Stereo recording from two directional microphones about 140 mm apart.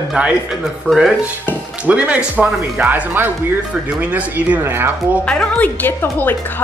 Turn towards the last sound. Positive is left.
turn(degrees=15)  # may be behind; listen again after turning